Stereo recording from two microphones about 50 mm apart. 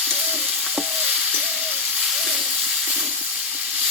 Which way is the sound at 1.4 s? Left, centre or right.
Centre.